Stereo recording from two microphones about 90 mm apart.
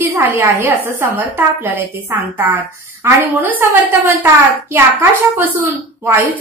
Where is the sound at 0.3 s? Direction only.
30° right (ahead or behind).